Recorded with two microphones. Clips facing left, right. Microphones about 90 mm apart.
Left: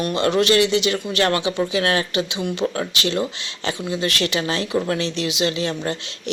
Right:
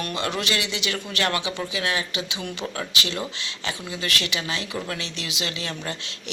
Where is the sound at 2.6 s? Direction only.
35° left (ahead or behind).